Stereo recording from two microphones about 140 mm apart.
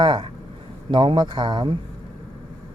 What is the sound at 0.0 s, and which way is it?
Speech, 30° right (ahead or behind).